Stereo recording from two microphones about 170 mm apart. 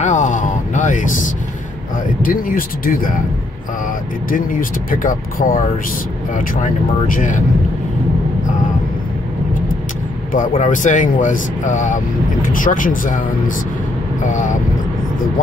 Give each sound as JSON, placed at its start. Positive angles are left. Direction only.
{"t": 0.0, "sound": "a sound", "side_deg": 45}
{"t": 2.2, "sound": "speech", "side_deg": 55}
{"t": 4.3, "sound": "speech", "side_deg": 55}
{"t": 10.3, "sound": "speech", "side_deg": 50}
{"t": 14.2, "sound": "speech", "side_deg": 45}